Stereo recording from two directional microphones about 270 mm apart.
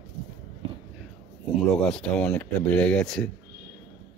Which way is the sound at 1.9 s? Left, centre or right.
Centre.